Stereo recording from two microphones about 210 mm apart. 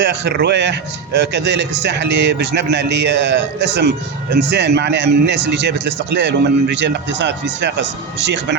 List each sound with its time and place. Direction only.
0.0 s a man's voice: 55° right (ahead or behind)